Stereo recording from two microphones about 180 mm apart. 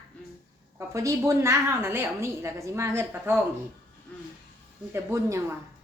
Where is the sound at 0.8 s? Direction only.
15° right (ahead or behind).